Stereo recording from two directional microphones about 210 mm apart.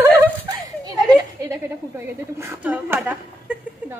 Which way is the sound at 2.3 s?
10° right (ahead or behind).